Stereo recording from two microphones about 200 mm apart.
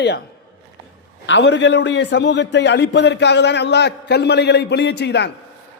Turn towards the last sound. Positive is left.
turn(degrees=60)  # may be behind; listen again after turning